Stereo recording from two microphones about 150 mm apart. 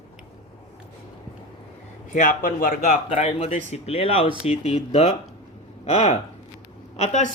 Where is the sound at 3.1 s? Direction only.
40° left (ahead or behind).